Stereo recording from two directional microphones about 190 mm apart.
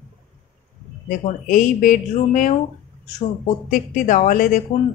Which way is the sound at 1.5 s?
45° left (ahead or behind).